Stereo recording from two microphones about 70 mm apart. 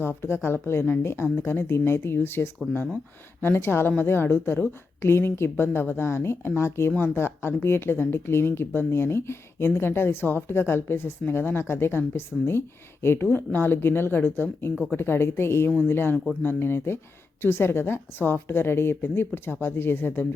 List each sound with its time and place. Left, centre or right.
0.0 s speech: left